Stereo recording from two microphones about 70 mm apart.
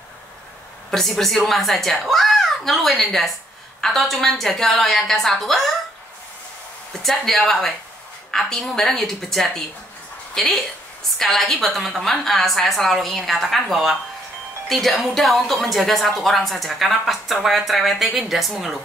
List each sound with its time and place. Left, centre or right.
0.8 s a woman's voice: centre
7.0 s a woman's voice: centre